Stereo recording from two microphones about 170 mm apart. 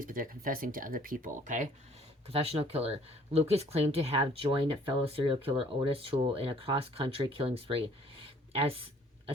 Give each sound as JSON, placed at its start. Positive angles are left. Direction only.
{"t": 0.0, "sound": "speech", "side_deg": -55}
{"t": 2.2, "sound": "speech", "side_deg": -35}